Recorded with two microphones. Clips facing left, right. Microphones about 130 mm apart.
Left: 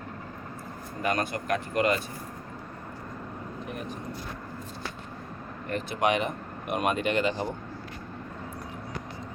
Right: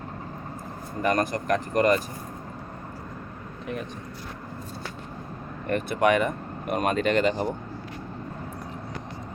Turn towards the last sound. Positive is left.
turn(degrees=-40)  # may be behind; listen again after turning